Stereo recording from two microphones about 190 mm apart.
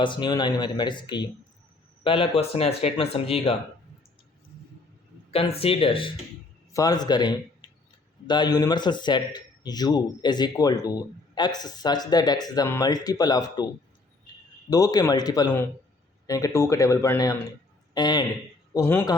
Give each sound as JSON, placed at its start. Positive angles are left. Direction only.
{"t": 0.0, "sound": "a man's voice", "side_deg": 25}
{"t": 5.3, "sound": "a man's voice", "side_deg": 30}
{"t": 14.7, "sound": "a man's voice", "side_deg": 20}